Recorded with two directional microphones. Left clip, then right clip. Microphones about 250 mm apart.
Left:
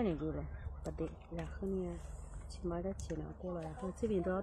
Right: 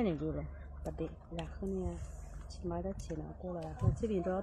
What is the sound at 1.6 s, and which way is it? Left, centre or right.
Speech, right.